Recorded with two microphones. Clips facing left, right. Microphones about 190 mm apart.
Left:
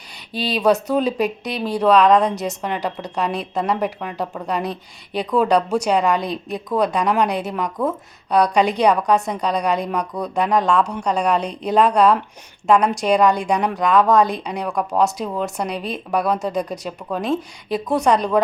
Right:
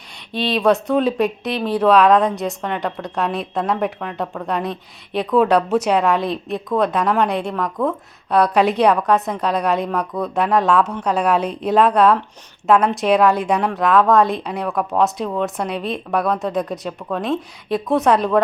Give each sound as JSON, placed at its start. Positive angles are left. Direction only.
{"t": 0.3, "sound": "speech", "side_deg": 0}